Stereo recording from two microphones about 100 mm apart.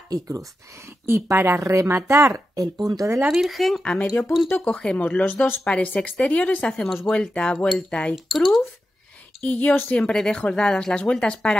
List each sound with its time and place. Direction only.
0.1 s speech: 35° right (ahead or behind)
3.3 s speech: centre (ahead or behind)
9.4 s speech: 15° left (ahead or behind)